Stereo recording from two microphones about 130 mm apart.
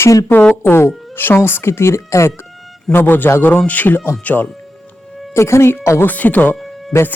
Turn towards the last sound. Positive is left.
turn(degrees=15)  # may be behind; listen again after turning